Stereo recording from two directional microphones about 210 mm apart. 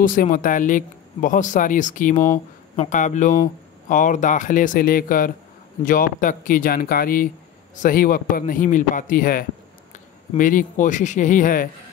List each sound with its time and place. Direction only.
0.0 s speech: 40° left (ahead or behind)